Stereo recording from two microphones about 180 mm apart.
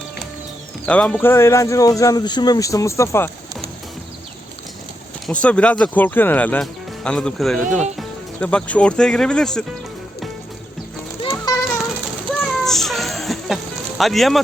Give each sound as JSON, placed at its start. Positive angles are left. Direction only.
{"t": 0.9, "sound": "speech", "side_deg": 5}
{"t": 5.2, "sound": "speech", "side_deg": 5}
{"t": 11.3, "sound": "children playing", "side_deg": 15}
{"t": 12.4, "sound": "a sound", "side_deg": 0}
{"t": 14.0, "sound": "speech", "side_deg": 0}